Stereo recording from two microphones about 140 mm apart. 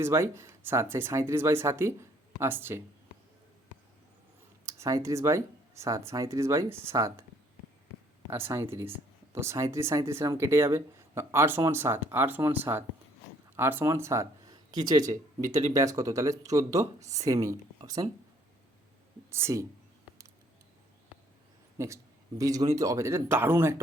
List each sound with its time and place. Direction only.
0.0 s speech: 20° right (ahead or behind)
4.6 s speech: 20° right (ahead or behind)
8.3 s speech: 15° right (ahead or behind)
19.3 s speech: 20° right (ahead or behind)
21.8 s a man's voice: 20° right (ahead or behind)